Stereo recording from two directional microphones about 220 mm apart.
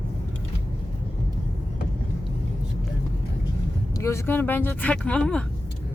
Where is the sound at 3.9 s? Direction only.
15° left (ahead or behind).